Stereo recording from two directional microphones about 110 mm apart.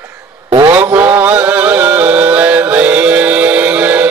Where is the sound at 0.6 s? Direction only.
15° right (ahead or behind).